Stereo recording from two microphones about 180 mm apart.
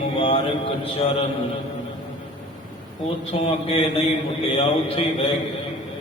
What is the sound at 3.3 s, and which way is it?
Mantra, 30° left (ahead or behind).